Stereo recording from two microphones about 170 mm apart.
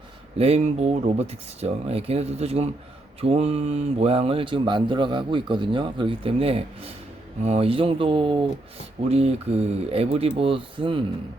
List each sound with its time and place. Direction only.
0.3 s speech: 40° right (ahead or behind)